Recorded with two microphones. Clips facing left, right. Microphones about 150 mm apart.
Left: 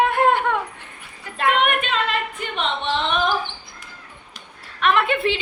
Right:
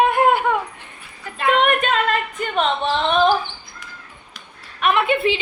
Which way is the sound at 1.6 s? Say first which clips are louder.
Right 4 dB; 45° right (ahead or behind).